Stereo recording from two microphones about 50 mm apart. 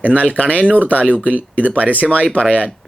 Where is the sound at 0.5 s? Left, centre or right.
Right.